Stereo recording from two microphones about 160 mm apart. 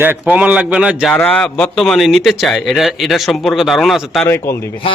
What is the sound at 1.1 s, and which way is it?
Speech, 10° left (ahead or behind).